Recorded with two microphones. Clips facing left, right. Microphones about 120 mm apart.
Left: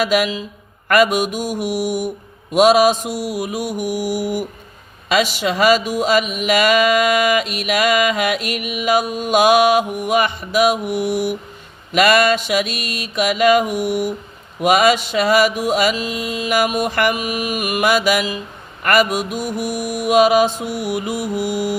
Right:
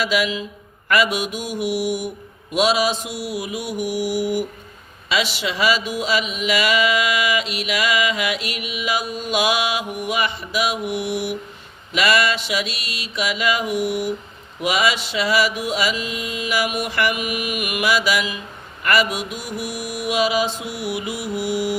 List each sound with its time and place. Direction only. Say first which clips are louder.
0.0 s mantra: left 4 dB; 50° left (ahead or behind)